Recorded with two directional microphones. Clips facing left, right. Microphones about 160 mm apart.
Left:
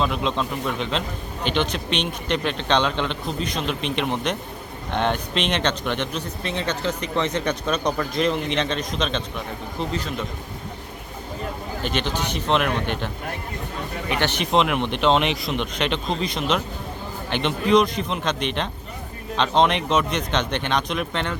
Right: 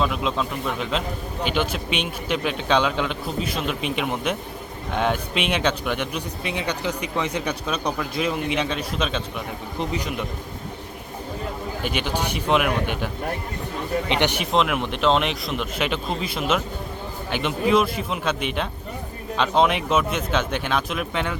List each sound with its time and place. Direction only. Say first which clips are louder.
0.0 s speech: even; centre (ahead or behind)
11.8 s speech: even; 10° right (ahead or behind)
14.1 s speech: even; 15° right (ahead or behind)
14.5 s speech: left 1 dB; centre (ahead or behind)